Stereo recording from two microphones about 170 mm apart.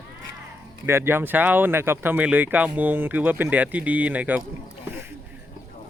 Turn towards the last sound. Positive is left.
turn(degrees=-10)  # may be behind; listen again after turning